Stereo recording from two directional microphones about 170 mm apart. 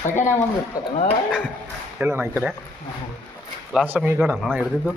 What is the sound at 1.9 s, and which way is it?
Speech, 10° right (ahead or behind).